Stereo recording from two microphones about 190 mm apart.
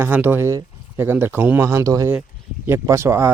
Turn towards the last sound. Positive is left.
turn(degrees=-15)  # may be behind; listen again after turning